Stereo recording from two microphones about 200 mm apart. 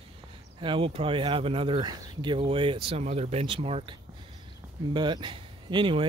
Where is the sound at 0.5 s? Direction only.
25° right (ahead or behind).